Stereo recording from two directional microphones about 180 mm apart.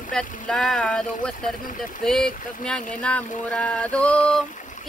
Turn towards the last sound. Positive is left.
turn(degrees=5)  # may be behind; listen again after turning